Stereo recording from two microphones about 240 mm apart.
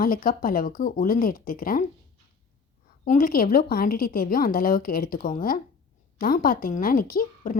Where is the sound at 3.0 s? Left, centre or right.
Left.